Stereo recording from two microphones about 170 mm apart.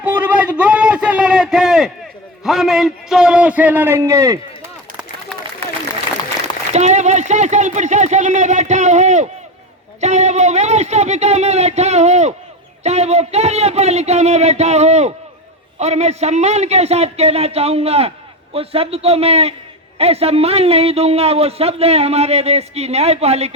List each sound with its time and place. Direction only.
0.0 s a sound: 10° right (ahead or behind)
2.4 s a man's voice: centre (ahead or behind); by 4.4 s 20° right (ahead or behind)
6.4 s a man's voice: 40° right (ahead or behind)